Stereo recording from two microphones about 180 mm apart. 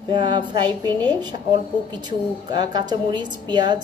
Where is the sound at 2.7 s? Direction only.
25° right (ahead or behind).